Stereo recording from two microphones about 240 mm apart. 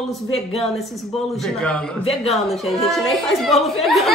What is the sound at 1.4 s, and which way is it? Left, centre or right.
Speech, centre.